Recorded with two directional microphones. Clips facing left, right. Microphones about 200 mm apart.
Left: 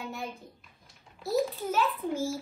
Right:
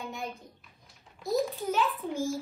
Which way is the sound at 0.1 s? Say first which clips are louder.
Even; centre (ahead or behind).